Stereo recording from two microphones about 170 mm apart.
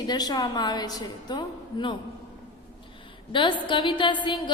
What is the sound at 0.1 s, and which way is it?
A woman's voice, 25° left (ahead or behind).